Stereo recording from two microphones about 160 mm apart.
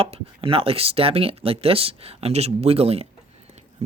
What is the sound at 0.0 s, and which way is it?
Speech, 35° right (ahead or behind).